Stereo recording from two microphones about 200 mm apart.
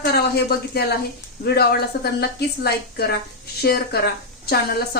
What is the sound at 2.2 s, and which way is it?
A woman's voice, 50° left (ahead or behind).